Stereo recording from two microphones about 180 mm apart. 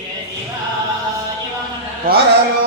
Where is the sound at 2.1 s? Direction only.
55° right (ahead or behind).